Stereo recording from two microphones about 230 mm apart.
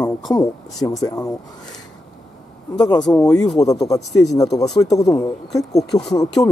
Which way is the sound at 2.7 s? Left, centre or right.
Centre.